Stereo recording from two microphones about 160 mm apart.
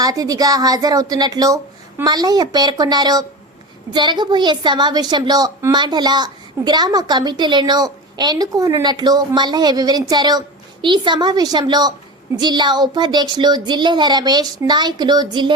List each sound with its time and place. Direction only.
0.0 s a woman's voice: 25° right (ahead or behind)